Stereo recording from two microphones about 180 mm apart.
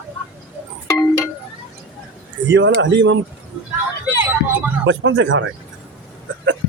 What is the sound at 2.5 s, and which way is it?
Speech, 90° right.